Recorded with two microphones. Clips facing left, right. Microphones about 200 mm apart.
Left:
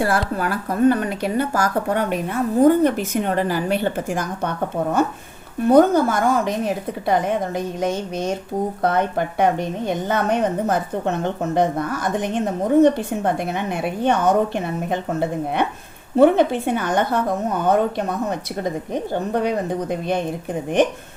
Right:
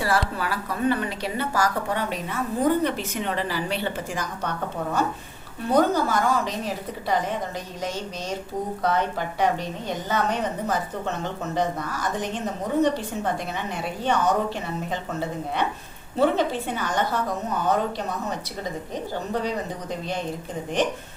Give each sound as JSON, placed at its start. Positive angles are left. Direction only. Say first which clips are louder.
{"t": 0.0, "sound": "speech", "louder": "left 4 dB", "side_deg": 50}
{"t": 5.6, "sound": "a woman's voice", "louder": "left 7 dB", "side_deg": 50}
{"t": 19.1, "sound": "a woman's voice", "louder": "left 6 dB", "side_deg": 55}